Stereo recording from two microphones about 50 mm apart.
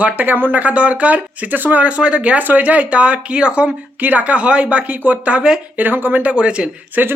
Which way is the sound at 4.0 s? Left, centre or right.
Right.